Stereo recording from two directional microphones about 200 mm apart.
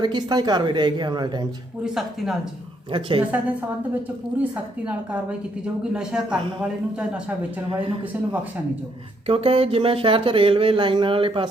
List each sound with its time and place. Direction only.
0.0 s speech: 20° right (ahead or behind)
1.8 s a man's voice: centre (ahead or behind)
2.9 s speech: 25° right (ahead or behind)
5.9 s a man's voice: 5° right (ahead or behind)
9.2 s speech: 30° right (ahead or behind)